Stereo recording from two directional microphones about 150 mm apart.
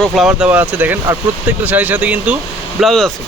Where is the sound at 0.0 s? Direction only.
Centre (ahead or behind).